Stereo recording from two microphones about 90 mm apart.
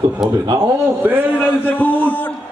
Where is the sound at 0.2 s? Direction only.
5° right (ahead or behind).